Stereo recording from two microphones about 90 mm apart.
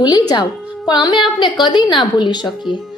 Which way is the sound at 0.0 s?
50° left (ahead or behind).